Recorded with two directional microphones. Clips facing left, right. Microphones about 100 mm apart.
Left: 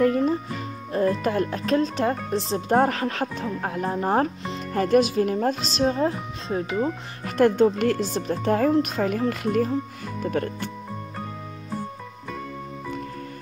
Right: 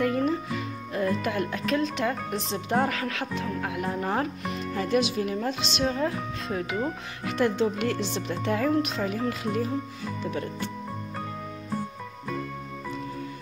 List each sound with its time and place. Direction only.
0.0 s music: 35° left (ahead or behind)
0.9 s speech: 35° left (ahead or behind)
4.7 s speech: 45° left (ahead or behind); by 6.7 s 30° left (ahead or behind)
7.2 s speech: 45° left (ahead or behind)